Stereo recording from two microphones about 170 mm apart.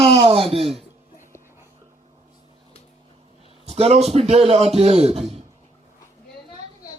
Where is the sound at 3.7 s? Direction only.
40° right (ahead or behind).